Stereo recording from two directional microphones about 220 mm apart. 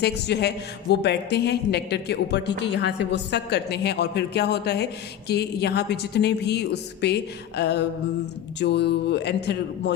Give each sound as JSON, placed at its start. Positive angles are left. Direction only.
{"t": 0.0, "sound": "a man's voice", "side_deg": 50}